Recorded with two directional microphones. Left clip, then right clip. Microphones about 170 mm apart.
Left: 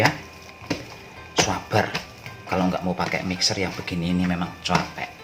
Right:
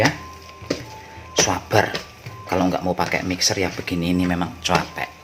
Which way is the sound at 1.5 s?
50° right (ahead or behind).